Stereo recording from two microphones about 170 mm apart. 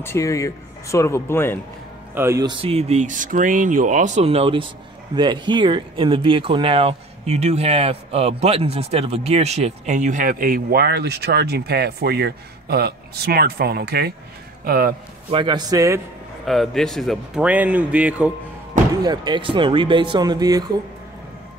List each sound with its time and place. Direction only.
0.0 s speech: 15° left (ahead or behind)
2.1 s speech: 15° right (ahead or behind)
2.6 s speech: 35° right (ahead or behind); by 14.1 s 70° right (ahead or behind)
14.6 s a man's voice: 55° right (ahead or behind)
15.3 s speech: 25° right (ahead or behind)
16.4 s speech: centre (ahead or behind)
19.0 s speech: 25° right (ahead or behind)